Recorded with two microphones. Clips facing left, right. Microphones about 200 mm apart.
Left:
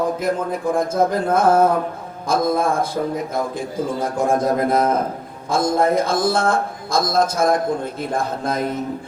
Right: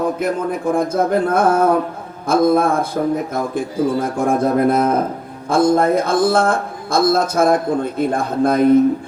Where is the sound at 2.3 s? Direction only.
60° right (ahead or behind).